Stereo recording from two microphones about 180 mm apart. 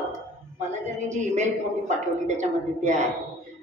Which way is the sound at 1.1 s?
40° right (ahead or behind).